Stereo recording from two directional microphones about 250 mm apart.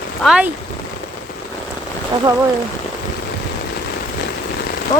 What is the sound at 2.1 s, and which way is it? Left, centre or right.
Speech, centre.